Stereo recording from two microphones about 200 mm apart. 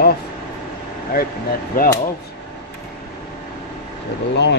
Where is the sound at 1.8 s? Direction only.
45° left (ahead or behind).